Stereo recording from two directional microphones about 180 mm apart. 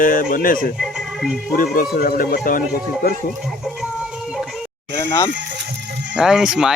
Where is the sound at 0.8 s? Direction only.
Centre (ahead or behind).